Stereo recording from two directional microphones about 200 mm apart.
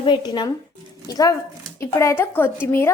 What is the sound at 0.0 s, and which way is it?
A woman's voice, 20° left (ahead or behind).